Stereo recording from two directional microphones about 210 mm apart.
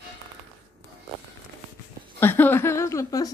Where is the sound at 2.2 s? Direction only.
10° left (ahead or behind).